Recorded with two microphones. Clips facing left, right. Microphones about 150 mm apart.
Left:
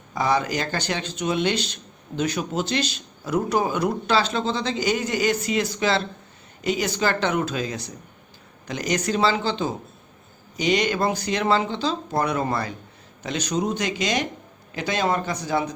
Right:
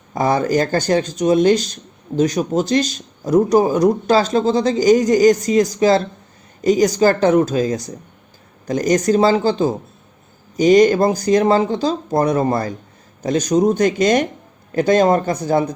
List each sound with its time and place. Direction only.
0.1 s speech: 50° right (ahead or behind)